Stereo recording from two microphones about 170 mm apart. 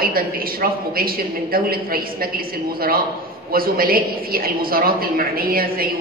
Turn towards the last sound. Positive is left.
turn(degrees=-60)  # may be behind; listen again after turning